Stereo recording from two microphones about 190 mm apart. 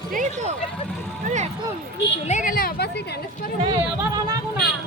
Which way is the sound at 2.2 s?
40° left (ahead or behind).